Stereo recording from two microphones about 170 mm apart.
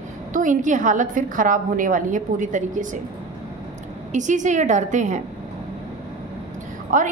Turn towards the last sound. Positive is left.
turn(degrees=-50)  # may be behind; listen again after turning